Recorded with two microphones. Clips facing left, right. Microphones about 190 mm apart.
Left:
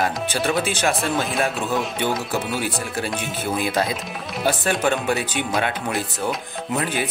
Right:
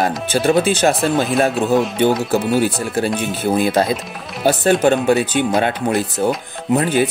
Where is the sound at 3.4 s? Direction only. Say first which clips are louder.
Right 7 dB; 35° right (ahead or behind).